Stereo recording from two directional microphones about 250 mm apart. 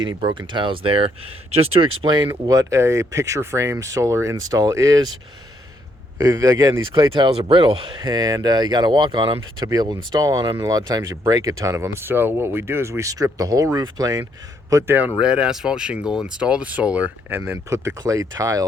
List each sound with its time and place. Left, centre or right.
0.0 s speech: centre
6.1 s speech: centre